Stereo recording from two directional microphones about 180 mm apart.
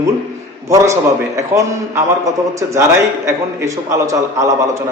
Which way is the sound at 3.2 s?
15° right (ahead or behind).